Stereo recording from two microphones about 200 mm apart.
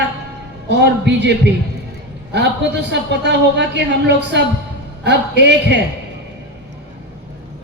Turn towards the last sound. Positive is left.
turn(degrees=-60)  # may be behind; listen again after turning